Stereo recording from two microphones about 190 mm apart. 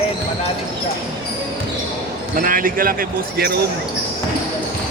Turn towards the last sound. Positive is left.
turn(degrees=-55)  # may be behind; listen again after turning